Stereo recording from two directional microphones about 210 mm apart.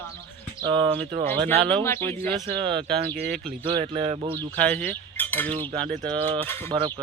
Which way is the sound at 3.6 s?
25° right (ahead or behind).